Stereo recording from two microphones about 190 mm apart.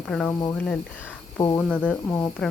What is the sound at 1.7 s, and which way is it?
Speech, 5° left (ahead or behind).